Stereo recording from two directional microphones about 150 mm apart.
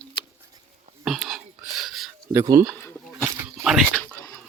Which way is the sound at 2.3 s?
20° right (ahead or behind).